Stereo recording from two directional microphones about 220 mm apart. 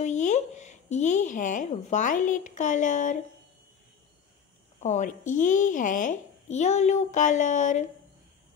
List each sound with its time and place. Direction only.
0.0 s speech: 35° left (ahead or behind)
4.7 s speech: 30° left (ahead or behind)